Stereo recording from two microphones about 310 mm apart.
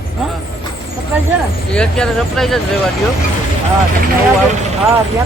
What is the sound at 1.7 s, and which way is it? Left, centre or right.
Speech, centre.